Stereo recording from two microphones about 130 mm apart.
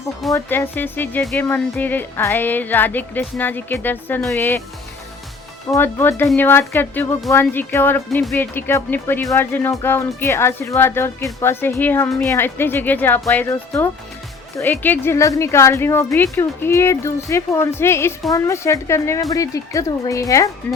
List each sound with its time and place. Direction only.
0.3 s speech: 15° left (ahead or behind)
5.7 s a woman's voice: 20° left (ahead or behind)